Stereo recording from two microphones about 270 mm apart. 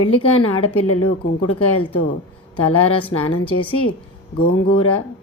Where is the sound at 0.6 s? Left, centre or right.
Left.